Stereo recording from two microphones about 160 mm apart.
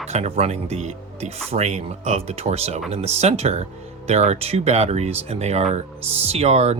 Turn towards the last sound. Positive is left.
turn(degrees=-40)  # may be behind; listen again after turning